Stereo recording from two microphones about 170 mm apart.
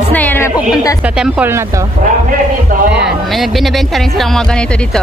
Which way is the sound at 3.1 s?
Centre (ahead or behind).